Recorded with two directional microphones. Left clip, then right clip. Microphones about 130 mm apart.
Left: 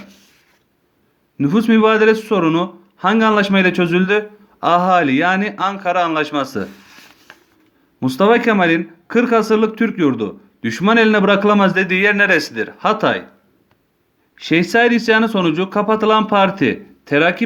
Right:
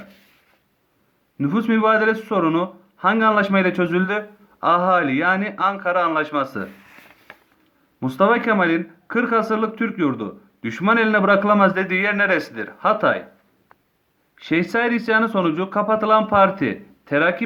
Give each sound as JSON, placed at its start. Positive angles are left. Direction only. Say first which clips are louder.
{"t": 1.4, "sound": "speech", "louder": "left 6 dB", "side_deg": 20}
{"t": 6.7, "sound": "a sound", "louder": "left 3 dB", "side_deg": -10}
{"t": 7.9, "sound": "speech", "louder": "left 4 dB", "side_deg": 20}
{"t": 14.3, "sound": "speech", "louder": "left 6 dB", "side_deg": 20}